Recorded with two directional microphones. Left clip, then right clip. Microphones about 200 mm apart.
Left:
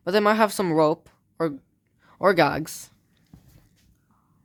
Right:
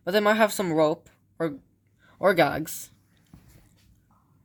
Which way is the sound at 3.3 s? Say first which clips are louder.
Left 1 dB; 20° left (ahead or behind).